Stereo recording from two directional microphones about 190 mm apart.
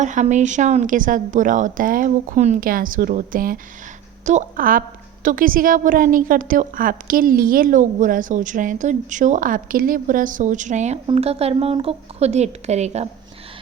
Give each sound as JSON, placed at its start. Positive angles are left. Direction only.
{"t": 0.0, "sound": "a woman's voice", "side_deg": -40}